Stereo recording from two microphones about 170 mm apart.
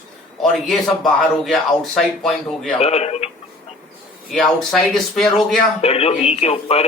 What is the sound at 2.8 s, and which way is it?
Speech, 40° left (ahead or behind).